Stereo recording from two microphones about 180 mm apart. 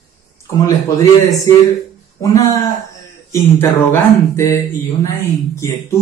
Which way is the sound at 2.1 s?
20° left (ahead or behind).